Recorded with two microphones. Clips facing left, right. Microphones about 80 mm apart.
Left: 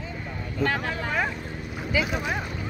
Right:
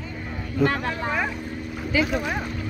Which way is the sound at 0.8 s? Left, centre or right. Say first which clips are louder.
Right 1 dB; centre.